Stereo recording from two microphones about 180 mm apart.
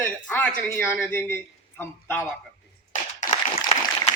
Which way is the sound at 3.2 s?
45° left (ahead or behind).